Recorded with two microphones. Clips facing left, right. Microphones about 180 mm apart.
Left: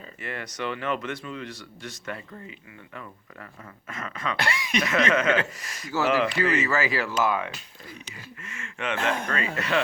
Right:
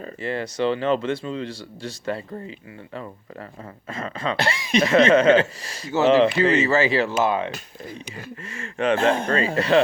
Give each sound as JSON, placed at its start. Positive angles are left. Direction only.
{"t": 0.2, "sound": "speech", "side_deg": -30}
{"t": 3.8, "sound": "speech", "side_deg": -30}